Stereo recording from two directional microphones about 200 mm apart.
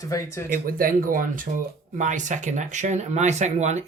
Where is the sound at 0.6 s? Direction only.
45° right (ahead or behind).